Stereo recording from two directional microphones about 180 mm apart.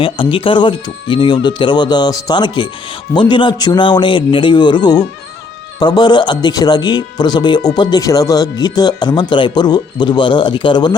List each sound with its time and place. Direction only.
0.0 s speech: 30° left (ahead or behind)